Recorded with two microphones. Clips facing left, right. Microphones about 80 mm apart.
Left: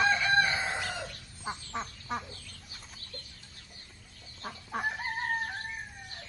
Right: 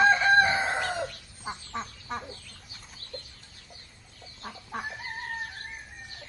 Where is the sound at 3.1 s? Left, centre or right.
Right.